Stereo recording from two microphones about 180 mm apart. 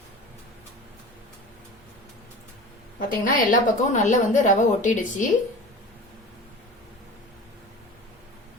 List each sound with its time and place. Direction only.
3.1 s a woman's voice: 45° left (ahead or behind)